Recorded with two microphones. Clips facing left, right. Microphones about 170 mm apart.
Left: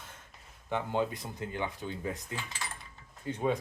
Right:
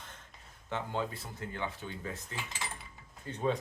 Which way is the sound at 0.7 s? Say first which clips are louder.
Left 4 dB; 15° left (ahead or behind).